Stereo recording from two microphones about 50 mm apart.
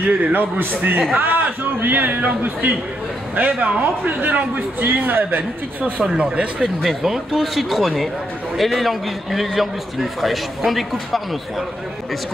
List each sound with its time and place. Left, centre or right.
0.0 s a man's voice: right
3.3 s a man's voice: right
5.9 s speech: centre
6.6 s a man's voice: centre